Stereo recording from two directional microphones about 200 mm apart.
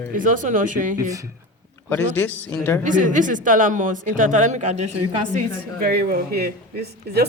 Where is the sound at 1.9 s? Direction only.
10° left (ahead or behind).